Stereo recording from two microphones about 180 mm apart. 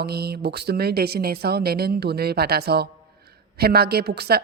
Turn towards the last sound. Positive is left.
turn(degrees=-60)  # may be behind; listen again after turning